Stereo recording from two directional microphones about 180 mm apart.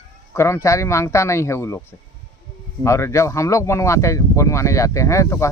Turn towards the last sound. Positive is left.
turn(degrees=15)  # may be behind; listen again after turning